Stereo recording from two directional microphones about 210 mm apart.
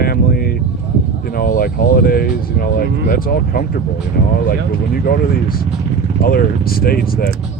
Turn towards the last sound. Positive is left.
turn(degrees=45)  # may be behind; listen again after turning